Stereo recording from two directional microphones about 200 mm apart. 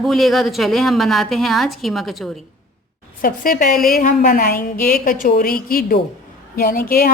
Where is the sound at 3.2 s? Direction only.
45° left (ahead or behind).